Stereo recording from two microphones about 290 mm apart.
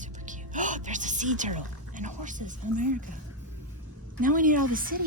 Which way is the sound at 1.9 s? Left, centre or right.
Right.